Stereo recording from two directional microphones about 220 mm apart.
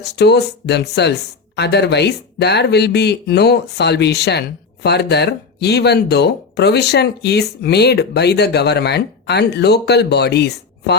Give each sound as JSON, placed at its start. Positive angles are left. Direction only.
{"t": 0.0, "sound": "speech", "side_deg": 50}